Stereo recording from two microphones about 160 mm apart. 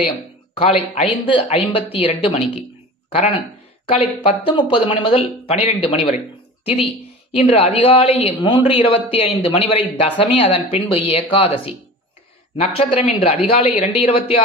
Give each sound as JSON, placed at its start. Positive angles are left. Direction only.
{"t": 0.9, "sound": "a woman's voice", "side_deg": 30}